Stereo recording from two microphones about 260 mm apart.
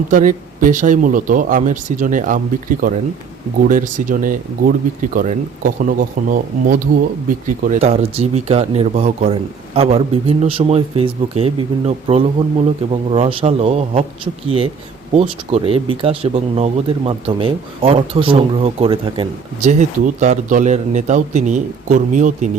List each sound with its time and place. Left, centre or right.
0.1 s speech: right